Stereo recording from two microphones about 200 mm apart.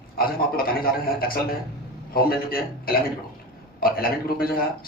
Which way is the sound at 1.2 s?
45° left (ahead or behind).